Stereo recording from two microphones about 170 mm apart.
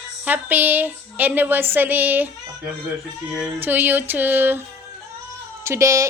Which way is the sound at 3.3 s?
10° right (ahead or behind).